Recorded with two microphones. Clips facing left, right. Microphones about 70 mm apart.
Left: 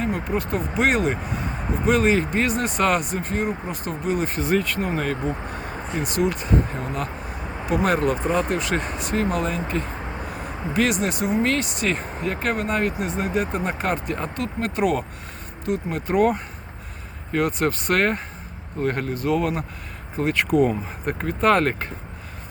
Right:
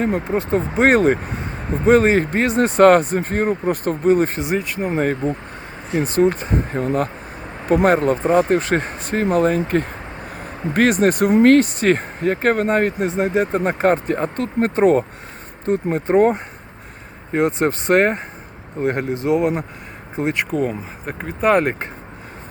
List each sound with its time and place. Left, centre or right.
0.3 s speech: right
4.4 s speech: centre
4.6 s speech: centre
4.9 s speech: right
20.7 s speech: centre